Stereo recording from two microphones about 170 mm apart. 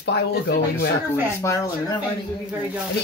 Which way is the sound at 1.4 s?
20° left (ahead or behind).